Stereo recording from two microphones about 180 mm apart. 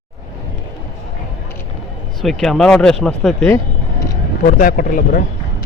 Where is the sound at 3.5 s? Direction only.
20° left (ahead or behind).